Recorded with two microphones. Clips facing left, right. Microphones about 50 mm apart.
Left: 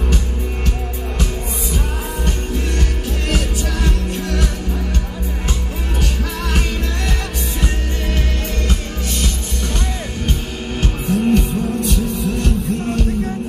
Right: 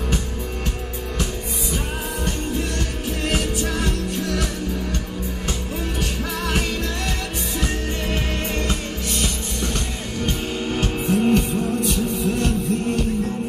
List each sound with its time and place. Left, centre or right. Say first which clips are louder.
3.8 s music: left 1 dB; left
11.1 s music: left 2 dB; right